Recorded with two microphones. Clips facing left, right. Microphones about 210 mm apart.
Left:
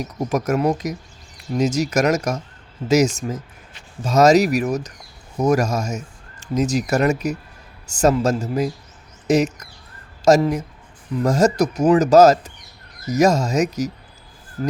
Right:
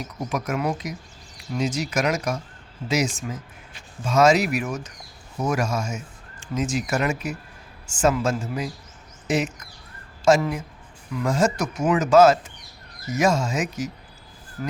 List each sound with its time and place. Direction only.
0.0 s speech: 45° left (ahead or behind)